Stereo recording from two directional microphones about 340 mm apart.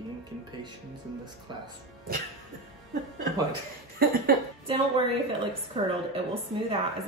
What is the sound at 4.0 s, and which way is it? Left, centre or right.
A woman's voice, right.